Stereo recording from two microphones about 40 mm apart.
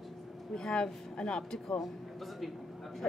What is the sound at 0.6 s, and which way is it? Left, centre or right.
Speech, centre.